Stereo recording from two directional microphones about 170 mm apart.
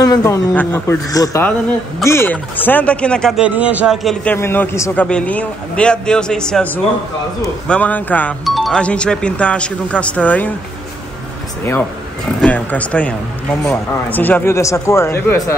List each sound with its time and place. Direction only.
0.0 s a man's voice: 20° left (ahead or behind)
12.4 s speech: 10° left (ahead or behind)